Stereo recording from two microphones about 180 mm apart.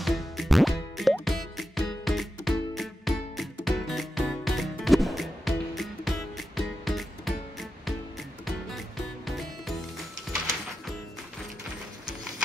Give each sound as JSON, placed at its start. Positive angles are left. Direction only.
{"t": 0.0, "sound": "music", "side_deg": 0}
{"t": 8.5, "sound": "music", "side_deg": 0}